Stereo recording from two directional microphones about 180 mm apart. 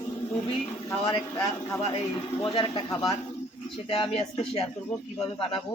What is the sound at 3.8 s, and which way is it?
Speech, 30° left (ahead or behind).